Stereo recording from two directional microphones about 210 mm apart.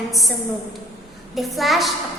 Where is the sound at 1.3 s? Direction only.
Centre (ahead or behind).